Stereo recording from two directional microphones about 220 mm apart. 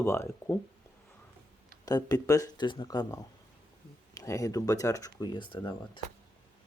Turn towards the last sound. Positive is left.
turn(degrees=20)  # may be behind; listen again after turning